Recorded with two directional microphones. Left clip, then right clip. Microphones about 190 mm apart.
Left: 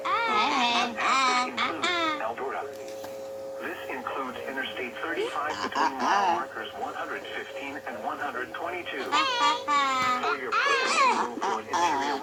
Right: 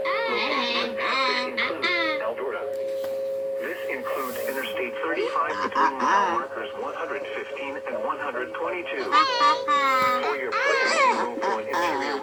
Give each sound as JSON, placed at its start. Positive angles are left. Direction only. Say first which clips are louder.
{"t": 1.0, "sound": "music", "louder": "left 1 dB", "side_deg": 25}
{"t": 5.7, "sound": "music", "louder": "right 4 dB", "side_deg": 0}
{"t": 9.1, "sound": "music", "louder": "right 5 dB", "side_deg": -5}